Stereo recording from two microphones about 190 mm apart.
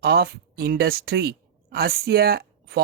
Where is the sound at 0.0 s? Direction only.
55° right (ahead or behind).